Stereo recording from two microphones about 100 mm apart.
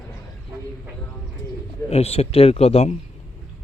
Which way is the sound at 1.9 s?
90° left.